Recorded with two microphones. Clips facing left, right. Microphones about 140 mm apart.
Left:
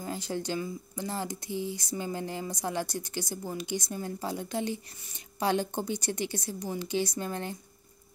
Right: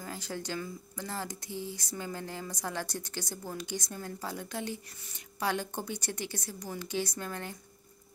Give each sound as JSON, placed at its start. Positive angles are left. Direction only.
{"t": 0.0, "sound": "speech", "side_deg": 20}